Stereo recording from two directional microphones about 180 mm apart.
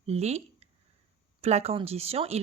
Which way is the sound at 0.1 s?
35° right (ahead or behind).